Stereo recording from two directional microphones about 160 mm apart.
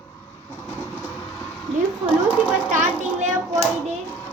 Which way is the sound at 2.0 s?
10° right (ahead or behind).